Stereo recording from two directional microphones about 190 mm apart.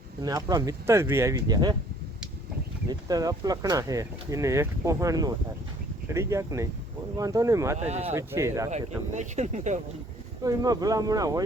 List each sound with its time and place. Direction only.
0.2 s speech: 20° right (ahead or behind)
3.1 s speech: 20° right (ahead or behind)
7.9 s speech: 35° right (ahead or behind)
8.1 s speech: 15° right (ahead or behind)
8.7 s speech: 40° right (ahead or behind)
10.4 s speech: 20° right (ahead or behind)